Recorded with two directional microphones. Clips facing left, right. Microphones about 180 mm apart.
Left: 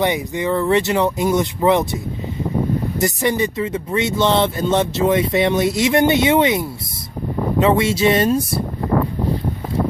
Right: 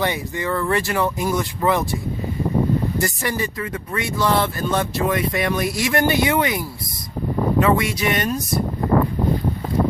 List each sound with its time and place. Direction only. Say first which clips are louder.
0.0 s speech: left 4 dB; 20° left (ahead or behind)
3.0 s speech: left 5 dB; 20° left (ahead or behind)